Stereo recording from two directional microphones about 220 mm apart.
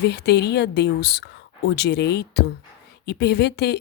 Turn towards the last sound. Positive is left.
turn(degrees=50)  # may be behind; listen again after turning